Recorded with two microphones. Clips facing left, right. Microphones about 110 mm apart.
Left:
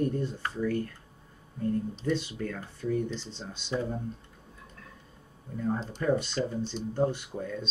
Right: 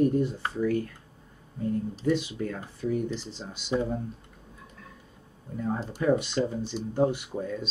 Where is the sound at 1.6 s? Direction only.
10° right (ahead or behind).